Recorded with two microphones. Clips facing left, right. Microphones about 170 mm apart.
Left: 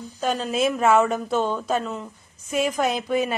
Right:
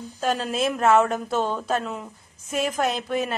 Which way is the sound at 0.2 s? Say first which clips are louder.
Left 1 dB; centre (ahead or behind).